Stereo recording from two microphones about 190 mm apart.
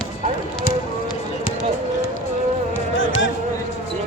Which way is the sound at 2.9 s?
80° left.